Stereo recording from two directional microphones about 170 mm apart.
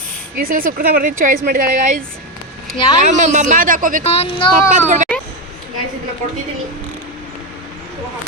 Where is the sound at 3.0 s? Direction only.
45° right (ahead or behind).